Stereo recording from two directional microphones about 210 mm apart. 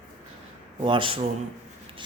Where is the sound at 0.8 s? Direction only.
25° right (ahead or behind).